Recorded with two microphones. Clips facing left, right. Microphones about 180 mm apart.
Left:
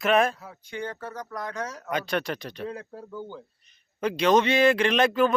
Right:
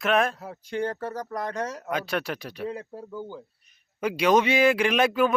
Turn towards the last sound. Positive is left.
turn(degrees=-10)  # may be behind; listen again after turning